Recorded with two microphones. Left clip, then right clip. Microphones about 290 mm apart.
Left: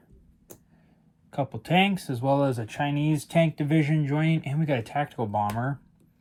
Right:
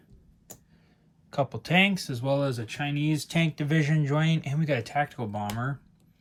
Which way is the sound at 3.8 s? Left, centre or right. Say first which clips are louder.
Left 2 dB; right.